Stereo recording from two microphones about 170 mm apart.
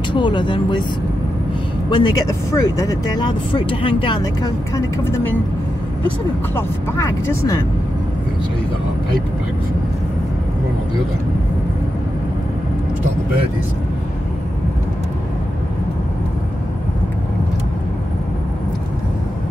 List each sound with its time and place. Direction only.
0.1 s speech: 25° left (ahead or behind)
1.9 s speech: 25° left (ahead or behind)